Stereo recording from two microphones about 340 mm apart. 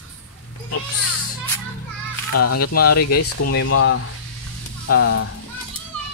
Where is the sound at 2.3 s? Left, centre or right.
Left.